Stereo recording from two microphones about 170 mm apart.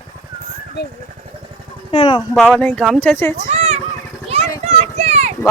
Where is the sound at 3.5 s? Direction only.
40° right (ahead or behind).